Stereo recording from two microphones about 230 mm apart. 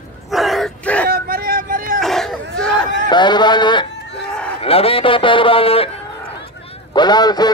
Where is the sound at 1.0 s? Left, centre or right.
Right.